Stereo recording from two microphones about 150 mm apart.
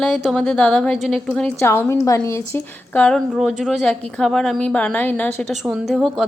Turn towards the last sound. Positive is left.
turn(degrees=-5)  # may be behind; listen again after turning